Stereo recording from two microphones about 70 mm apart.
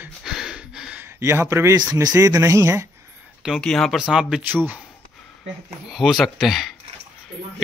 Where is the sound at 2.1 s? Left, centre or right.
Right.